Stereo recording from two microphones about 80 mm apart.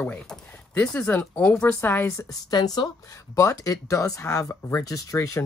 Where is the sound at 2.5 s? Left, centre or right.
Left.